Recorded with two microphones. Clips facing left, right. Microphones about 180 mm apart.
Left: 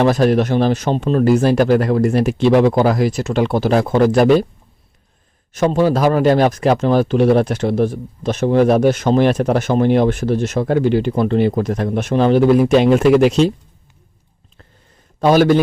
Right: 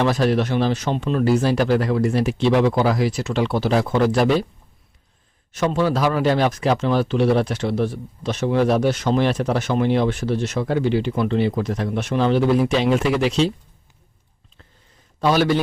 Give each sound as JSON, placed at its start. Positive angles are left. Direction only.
{"t": 0.0, "sound": "a man's voice", "side_deg": 45}
{"t": 5.5, "sound": "a man's voice", "side_deg": 45}
{"t": 15.2, "sound": "a man's voice", "side_deg": 50}